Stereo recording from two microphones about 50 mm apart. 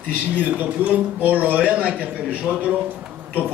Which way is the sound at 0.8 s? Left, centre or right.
Right.